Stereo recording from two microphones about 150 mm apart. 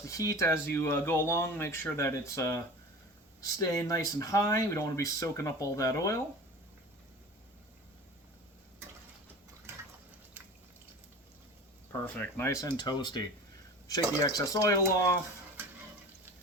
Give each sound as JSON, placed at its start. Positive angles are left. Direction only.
{"t": 0.0, "sound": "speech", "side_deg": 20}
{"t": 11.9, "sound": "speech", "side_deg": 15}